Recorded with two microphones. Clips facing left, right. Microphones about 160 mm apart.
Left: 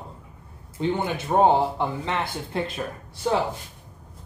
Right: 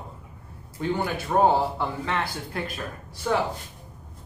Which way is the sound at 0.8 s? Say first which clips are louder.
Left 2 dB; 20° left (ahead or behind).